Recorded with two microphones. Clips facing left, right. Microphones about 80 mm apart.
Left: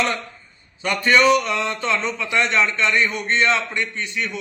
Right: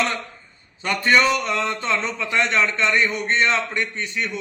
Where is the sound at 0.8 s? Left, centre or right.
Right.